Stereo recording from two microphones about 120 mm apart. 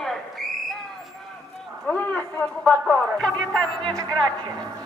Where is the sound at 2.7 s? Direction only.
5° left (ahead or behind).